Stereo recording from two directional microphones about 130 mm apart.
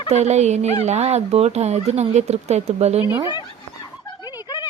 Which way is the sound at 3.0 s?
20° right (ahead or behind).